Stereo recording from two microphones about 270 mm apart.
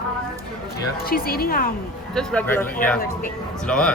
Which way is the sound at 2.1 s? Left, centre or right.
Centre.